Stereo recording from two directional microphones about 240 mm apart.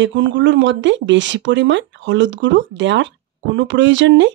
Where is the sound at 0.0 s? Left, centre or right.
Right.